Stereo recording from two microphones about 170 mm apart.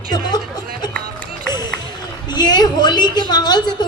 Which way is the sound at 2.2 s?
25° left (ahead or behind).